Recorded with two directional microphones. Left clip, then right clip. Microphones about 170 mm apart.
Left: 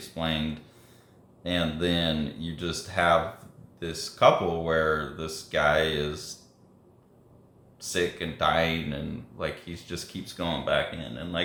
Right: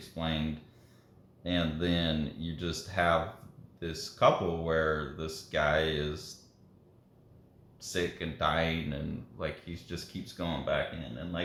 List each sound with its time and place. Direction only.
0.0 s speech: centre (ahead or behind)
1.5 s speech: centre (ahead or behind)
7.8 s speech: centre (ahead or behind)